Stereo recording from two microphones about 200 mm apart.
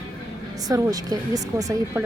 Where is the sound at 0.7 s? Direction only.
20° right (ahead or behind).